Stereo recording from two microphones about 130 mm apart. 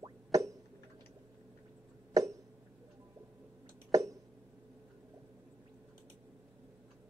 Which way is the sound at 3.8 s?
25° right (ahead or behind).